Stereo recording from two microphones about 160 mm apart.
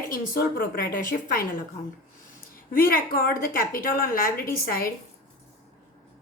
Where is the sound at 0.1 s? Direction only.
65° left (ahead or behind).